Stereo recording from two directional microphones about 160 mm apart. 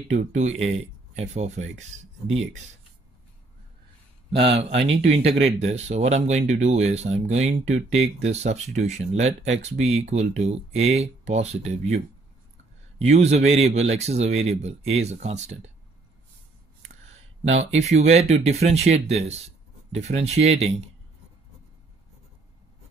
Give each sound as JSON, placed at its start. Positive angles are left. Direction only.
{"t": 0.1, "sound": "speech", "side_deg": -45}
{"t": 4.4, "sound": "speech", "side_deg": -35}
{"t": 13.0, "sound": "speech", "side_deg": -45}
{"t": 17.1, "sound": "speech", "side_deg": -45}